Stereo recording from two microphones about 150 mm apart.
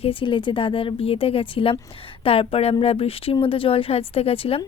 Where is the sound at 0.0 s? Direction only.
35° left (ahead or behind).